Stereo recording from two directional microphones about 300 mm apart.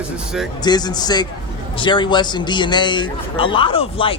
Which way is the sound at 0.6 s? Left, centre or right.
Centre.